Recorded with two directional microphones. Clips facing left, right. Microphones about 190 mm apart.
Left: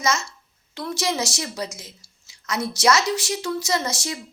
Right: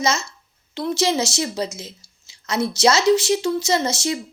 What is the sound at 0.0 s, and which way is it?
A woman's voice, 25° right (ahead or behind).